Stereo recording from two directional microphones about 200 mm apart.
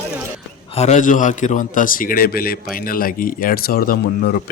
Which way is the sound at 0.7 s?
35° left (ahead or behind).